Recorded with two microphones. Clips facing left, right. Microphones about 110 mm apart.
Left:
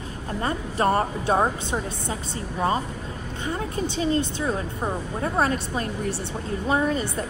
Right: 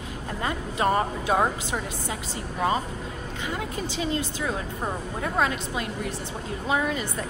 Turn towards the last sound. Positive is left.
turn(degrees=35)  # may be behind; listen again after turning